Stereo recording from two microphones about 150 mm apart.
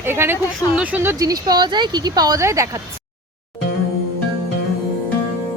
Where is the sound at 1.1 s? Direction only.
25° right (ahead or behind).